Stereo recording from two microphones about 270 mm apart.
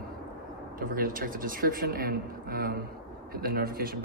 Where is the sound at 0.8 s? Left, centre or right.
Right.